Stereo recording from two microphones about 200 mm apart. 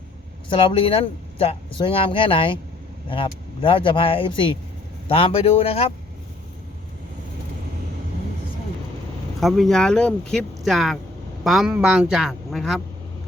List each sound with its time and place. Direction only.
0.5 s speech: 25° left (ahead or behind)
9.4 s speech: centre (ahead or behind)